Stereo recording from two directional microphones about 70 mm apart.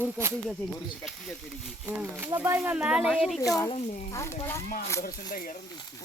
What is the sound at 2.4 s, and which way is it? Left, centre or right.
Speech, right.